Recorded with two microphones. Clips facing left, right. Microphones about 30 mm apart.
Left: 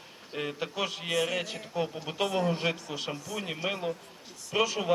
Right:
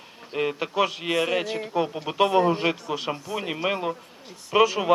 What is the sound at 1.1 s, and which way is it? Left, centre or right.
Speech, right.